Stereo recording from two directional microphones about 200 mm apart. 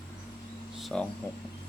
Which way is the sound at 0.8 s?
5° left (ahead or behind).